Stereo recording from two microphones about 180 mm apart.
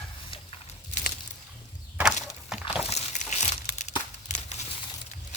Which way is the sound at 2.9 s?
40° left (ahead or behind).